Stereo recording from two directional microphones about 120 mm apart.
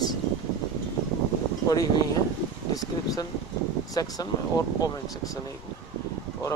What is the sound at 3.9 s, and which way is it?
Speech, 30° left (ahead or behind).